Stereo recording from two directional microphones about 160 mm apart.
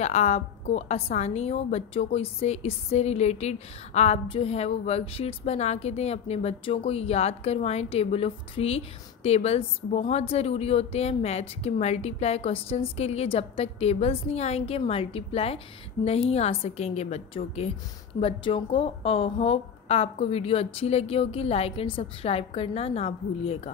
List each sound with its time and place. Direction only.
0.0 s a woman's voice: 45° left (ahead or behind)